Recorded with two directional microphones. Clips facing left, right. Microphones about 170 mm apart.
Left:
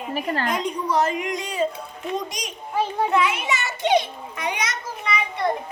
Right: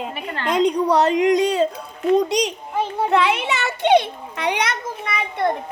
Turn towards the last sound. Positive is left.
turn(degrees=-55)  # may be behind; listen again after turning